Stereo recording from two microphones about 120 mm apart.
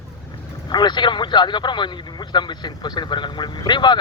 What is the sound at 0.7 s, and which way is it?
Speech, 40° left (ahead or behind).